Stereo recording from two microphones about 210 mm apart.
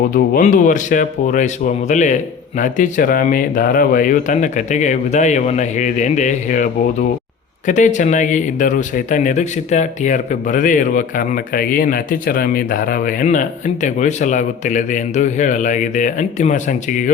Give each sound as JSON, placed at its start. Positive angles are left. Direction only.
{"t": 0.1, "sound": "speech", "side_deg": 40}
{"t": 7.7, "sound": "speech", "side_deg": 35}